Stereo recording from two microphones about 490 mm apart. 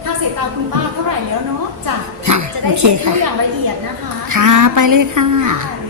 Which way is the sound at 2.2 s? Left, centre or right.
Right.